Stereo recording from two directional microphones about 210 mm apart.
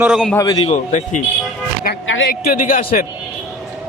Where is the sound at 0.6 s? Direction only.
35° left (ahead or behind).